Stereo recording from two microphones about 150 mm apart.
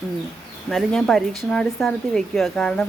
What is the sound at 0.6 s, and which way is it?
Speech, centre (ahead or behind).